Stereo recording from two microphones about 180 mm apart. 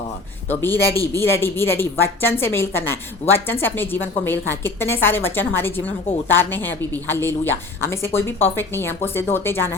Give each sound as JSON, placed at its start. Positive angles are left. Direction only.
{"t": 0.4, "sound": "a woman's voice", "side_deg": 10}